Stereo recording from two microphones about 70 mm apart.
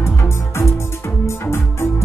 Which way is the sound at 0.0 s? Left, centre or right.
Left.